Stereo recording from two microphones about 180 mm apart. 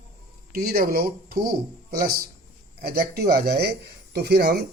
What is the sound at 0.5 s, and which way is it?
Speech, 55° right (ahead or behind).